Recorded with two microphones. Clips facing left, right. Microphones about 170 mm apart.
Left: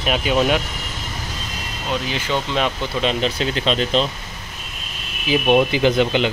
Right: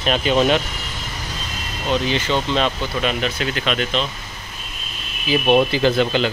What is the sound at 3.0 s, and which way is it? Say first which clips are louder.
Speech: left 3 dB; 30° left (ahead or behind).